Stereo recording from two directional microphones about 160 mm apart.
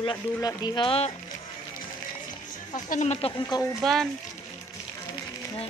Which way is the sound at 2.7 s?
50° left (ahead or behind).